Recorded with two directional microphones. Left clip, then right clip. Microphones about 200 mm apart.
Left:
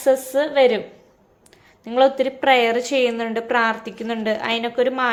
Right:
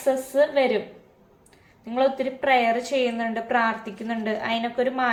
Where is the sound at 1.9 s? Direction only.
55° left (ahead or behind).